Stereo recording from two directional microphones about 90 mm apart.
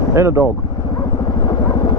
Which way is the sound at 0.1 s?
30° right (ahead or behind).